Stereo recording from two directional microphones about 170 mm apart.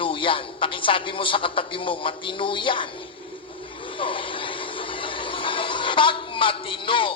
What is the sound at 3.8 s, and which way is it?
Vehicle, 30° left (ahead or behind).